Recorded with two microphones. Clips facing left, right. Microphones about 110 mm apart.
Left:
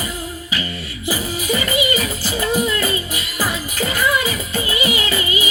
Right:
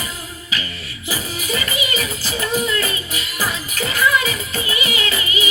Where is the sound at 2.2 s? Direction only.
20° left (ahead or behind).